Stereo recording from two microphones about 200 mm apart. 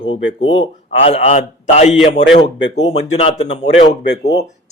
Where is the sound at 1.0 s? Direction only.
35° left (ahead or behind).